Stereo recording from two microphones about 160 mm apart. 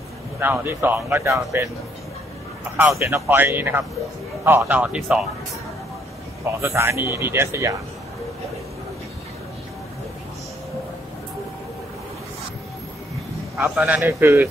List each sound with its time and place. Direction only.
0.4 s speech: 15° right (ahead or behind)
2.8 s speech: 15° right (ahead or behind)
6.6 s speech: 15° right (ahead or behind)
13.7 s speech: 10° right (ahead or behind)